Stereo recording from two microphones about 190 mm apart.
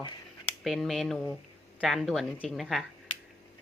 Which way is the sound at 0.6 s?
Centre (ahead or behind).